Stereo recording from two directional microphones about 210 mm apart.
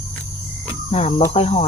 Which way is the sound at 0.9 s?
30° left (ahead or behind).